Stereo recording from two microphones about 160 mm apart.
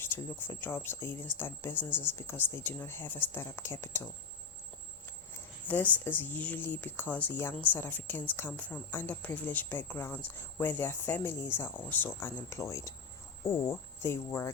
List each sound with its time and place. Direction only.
0.0 s speech: 15° left (ahead or behind)
5.6 s speech: 10° left (ahead or behind)